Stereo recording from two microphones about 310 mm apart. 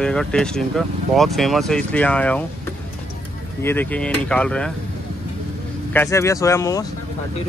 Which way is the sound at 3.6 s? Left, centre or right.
Centre.